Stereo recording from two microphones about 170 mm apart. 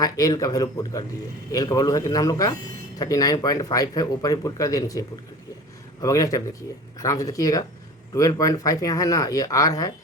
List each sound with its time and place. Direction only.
0.0 s speech: 20° left (ahead or behind)